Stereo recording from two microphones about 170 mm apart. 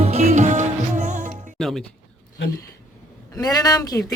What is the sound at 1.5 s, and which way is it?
Music, centre (ahead or behind).